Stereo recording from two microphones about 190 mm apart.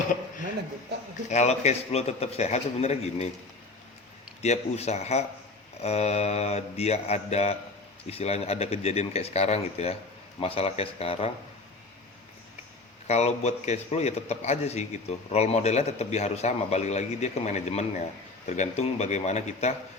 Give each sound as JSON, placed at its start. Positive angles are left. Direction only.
{"t": 1.3, "sound": "a man's voice", "side_deg": 35}
{"t": 4.4, "sound": "a man's voice", "side_deg": 35}
{"t": 13.1, "sound": "a man's voice", "side_deg": 35}